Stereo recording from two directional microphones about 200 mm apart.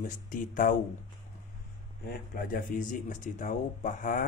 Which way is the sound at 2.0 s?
45° left (ahead or behind).